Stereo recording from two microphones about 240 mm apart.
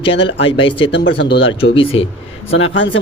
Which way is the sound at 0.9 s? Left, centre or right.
Left.